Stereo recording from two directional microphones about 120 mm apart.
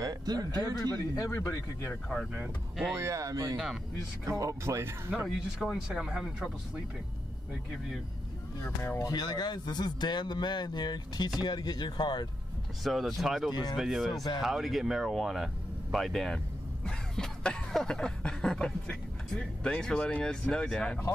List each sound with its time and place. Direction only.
0.0 s a sound: 30° right (ahead or behind)
0.9 s speech: 25° left (ahead or behind)
2.9 s speech: 25° right (ahead or behind)
5.2 s speech: 5° right (ahead or behind)
8.6 s speech: 20° left (ahead or behind)
9.0 s speech: 35° left (ahead or behind)
12.8 s speech: centre (ahead or behind)
13.5 s speech: 35° left (ahead or behind)
13.7 s speech: centre (ahead or behind)
16.8 s a sound: 5° left (ahead or behind)